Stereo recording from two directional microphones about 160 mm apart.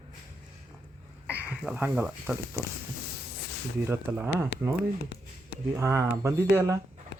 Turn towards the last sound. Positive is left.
turn(degrees=-15)  # may be behind; listen again after turning